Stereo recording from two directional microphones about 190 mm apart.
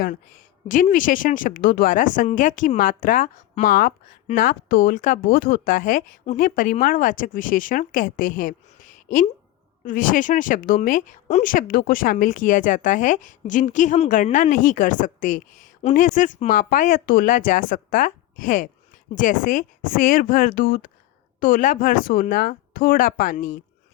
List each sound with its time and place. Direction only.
0.7 s speech: 45° left (ahead or behind)